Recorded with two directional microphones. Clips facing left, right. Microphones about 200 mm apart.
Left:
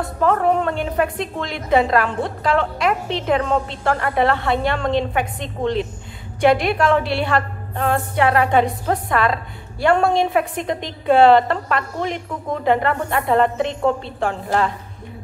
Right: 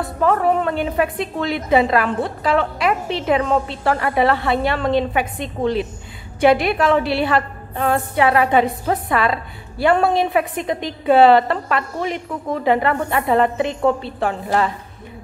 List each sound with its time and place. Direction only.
0.2 s a woman's voice: 5° right (ahead or behind)